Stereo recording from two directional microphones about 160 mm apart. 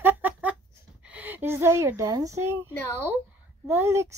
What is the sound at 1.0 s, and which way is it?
A woman's voice, 10° right (ahead or behind).